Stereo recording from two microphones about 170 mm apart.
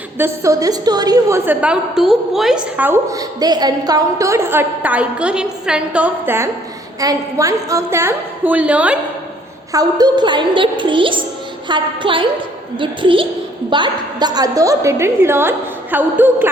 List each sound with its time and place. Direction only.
0.2 s a woman's voice: 20° right (ahead or behind)
1.5 s a woman's voice: 5° right (ahead or behind)
9.7 s a woman's voice: 25° right (ahead or behind)